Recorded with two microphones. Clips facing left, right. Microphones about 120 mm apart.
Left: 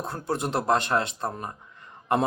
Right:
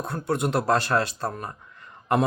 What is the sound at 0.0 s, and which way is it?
Speech, 25° left (ahead or behind).